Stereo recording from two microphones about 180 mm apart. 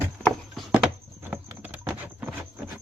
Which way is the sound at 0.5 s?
5° right (ahead or behind).